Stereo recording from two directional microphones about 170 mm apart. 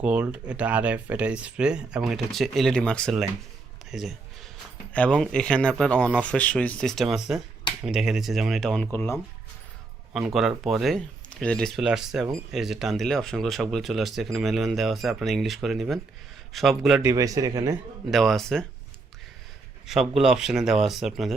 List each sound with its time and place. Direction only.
0.0 s speech: 5° right (ahead or behind); by 9.1 s 15° left (ahead or behind)
10.1 s speech: 5° right (ahead or behind)
17.0 s speech: 20° right (ahead or behind)
18.1 s speech: centre (ahead or behind)
19.9 s speech: centre (ahead or behind)